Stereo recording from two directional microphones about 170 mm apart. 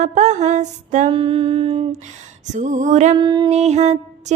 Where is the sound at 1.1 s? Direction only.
30° right (ahead or behind).